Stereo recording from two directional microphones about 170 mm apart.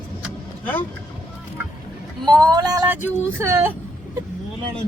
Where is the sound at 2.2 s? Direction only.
25° right (ahead or behind).